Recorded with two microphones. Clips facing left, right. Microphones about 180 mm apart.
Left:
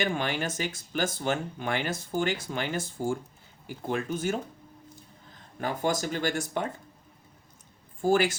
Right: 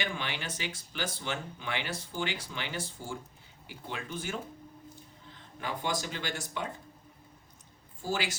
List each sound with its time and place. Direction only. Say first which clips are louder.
0.0 s speech: left 8 dB; 45° left (ahead or behind)
5.5 s speech: left 6 dB; 45° left (ahead or behind)
8.0 s speech: left 10 dB; 50° left (ahead or behind)